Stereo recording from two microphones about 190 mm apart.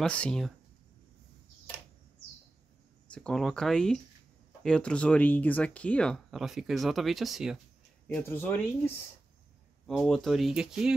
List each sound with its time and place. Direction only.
0.0 s speech: 5° left (ahead or behind)
3.1 s speech: 5° left (ahead or behind)
8.1 s speech: 10° left (ahead or behind)